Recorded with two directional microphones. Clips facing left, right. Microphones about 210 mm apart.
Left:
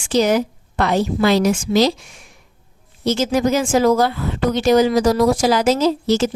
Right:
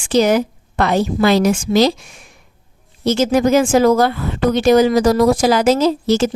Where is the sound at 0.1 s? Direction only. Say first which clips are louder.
Right 2 dB; 55° right (ahead or behind).